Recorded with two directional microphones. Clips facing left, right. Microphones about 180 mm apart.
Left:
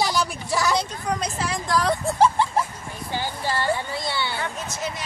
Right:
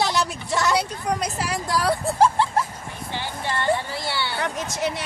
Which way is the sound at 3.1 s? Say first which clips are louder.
Left 2 dB; 35° left (ahead or behind).